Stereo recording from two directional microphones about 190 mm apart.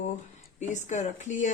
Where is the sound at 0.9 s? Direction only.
40° left (ahead or behind).